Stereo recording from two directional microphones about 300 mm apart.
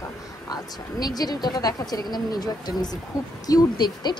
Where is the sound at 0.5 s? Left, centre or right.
Centre.